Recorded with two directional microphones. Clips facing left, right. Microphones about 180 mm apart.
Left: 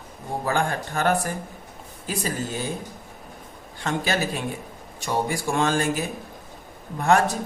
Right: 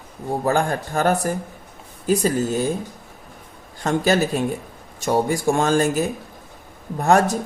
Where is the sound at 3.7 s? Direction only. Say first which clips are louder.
Right 7 dB; 40° right (ahead or behind).